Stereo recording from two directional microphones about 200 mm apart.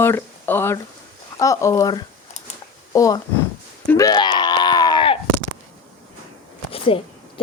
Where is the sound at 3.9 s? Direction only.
20° left (ahead or behind).